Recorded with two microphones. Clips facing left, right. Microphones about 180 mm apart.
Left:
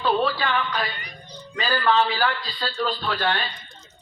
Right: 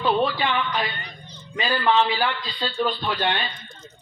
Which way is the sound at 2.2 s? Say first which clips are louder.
Left 1 dB; 40° left (ahead or behind).